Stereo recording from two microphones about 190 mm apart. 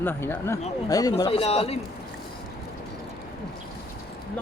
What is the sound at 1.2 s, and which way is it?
Speech, 30° left (ahead or behind).